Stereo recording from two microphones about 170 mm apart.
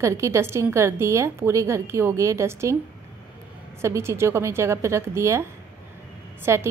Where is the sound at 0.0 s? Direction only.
15° right (ahead or behind).